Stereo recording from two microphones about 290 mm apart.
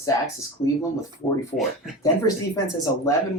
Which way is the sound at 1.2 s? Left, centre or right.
Centre.